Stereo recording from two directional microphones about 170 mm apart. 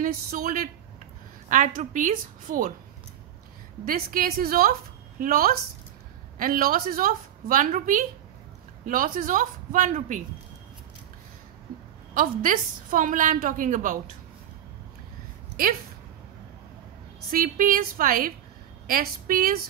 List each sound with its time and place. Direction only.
0.0 s a woman's voice: 55° right (ahead or behind)
3.8 s a woman's voice: 55° right (ahead or behind)
12.1 s a woman's voice: 55° right (ahead or behind)
17.3 s a woman's voice: 55° right (ahead or behind)